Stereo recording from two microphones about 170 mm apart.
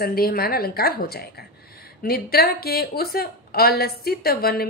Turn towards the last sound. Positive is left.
turn(degrees=65)  # may be behind; listen again after turning